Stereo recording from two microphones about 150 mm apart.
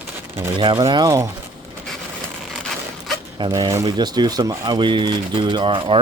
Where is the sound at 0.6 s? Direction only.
35° right (ahead or behind).